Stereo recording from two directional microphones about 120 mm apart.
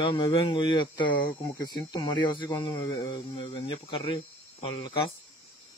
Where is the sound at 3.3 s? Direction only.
60° left (ahead or behind).